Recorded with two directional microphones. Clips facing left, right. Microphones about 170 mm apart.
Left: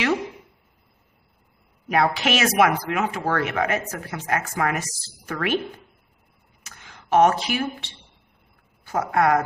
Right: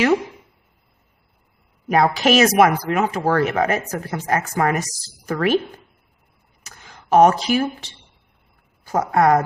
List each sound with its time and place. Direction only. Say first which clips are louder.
1.9 s speech: right 5 dB; 40° right (ahead or behind)
6.6 s a sound: right 3 dB; 40° right (ahead or behind)
8.8 s speech: right 4 dB; 40° right (ahead or behind)